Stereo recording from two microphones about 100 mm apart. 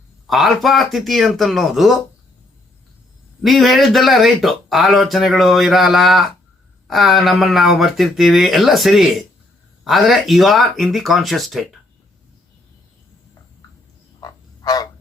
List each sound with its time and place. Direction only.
0.3 s speech: centre (ahead or behind)
3.4 s speech: centre (ahead or behind)
14.2 s frog: 40° left (ahead or behind)